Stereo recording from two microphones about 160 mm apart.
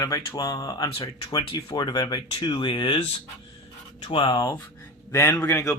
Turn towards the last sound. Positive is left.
turn(degrees=15)  # may be behind; listen again after turning